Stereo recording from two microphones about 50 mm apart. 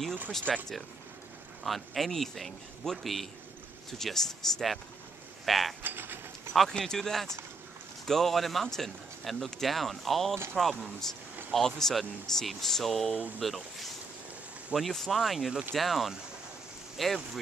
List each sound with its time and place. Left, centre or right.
0.5 s speech: centre
5.4 s mechanisms: centre
5.8 s mechanisms: right
6.8 s speech: centre